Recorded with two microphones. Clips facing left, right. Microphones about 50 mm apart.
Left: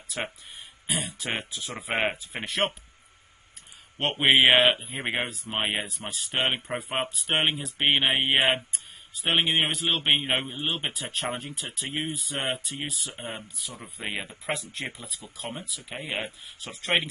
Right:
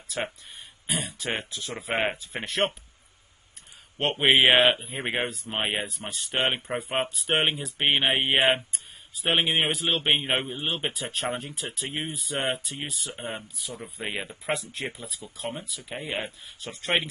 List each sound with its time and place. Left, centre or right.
0.8 s speech: centre
4.2 s a man's voice: centre
13.1 s speech: right
13.6 s speech: centre